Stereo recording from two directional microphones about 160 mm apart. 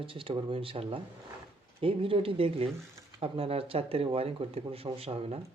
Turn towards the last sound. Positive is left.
turn(degrees=-35)  # may be behind; listen again after turning